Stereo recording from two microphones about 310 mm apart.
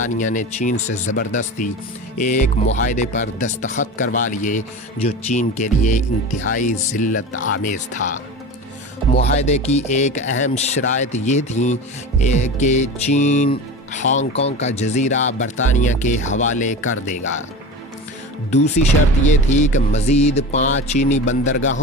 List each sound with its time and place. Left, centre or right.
0.2 s music: left
9.1 s music: left
18.5 s music: left
21.2 s speech: left